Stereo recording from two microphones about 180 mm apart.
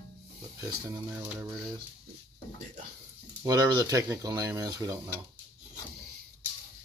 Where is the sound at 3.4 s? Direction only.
20° right (ahead or behind).